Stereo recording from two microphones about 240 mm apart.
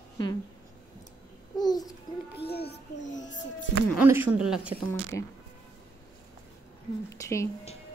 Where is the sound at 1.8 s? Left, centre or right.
Left.